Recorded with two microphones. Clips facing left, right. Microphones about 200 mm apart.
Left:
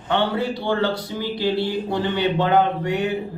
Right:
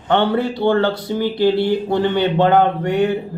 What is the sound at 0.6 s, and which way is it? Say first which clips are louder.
Speech: right 6 dB; 55° right (ahead or behind).